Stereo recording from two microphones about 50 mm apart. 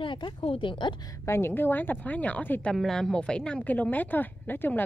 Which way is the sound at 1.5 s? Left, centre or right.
Left.